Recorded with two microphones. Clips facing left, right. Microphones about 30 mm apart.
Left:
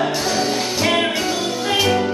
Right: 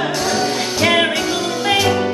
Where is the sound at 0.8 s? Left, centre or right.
Right.